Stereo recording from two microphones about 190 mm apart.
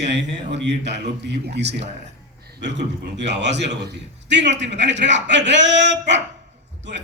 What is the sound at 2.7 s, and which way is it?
Speech, 65° right (ahead or behind).